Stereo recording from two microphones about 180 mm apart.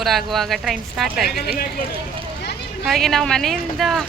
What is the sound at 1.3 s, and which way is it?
Speech, 60° left (ahead or behind).